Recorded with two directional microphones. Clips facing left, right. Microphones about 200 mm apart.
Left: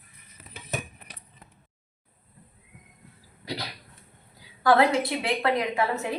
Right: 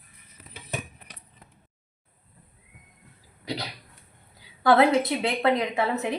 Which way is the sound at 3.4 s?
20° right (ahead or behind).